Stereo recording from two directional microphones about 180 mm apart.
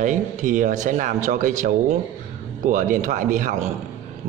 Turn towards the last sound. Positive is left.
turn(degrees=-45)  # may be behind; listen again after turning